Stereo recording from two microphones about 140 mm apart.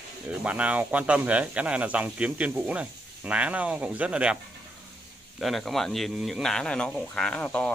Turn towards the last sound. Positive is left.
turn(degrees=5)  # may be behind; listen again after turning